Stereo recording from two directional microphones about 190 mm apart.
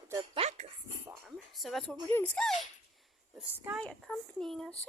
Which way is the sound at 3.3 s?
10° right (ahead or behind).